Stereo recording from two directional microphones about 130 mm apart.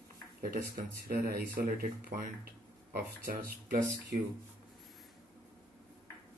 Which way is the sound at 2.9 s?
90° right.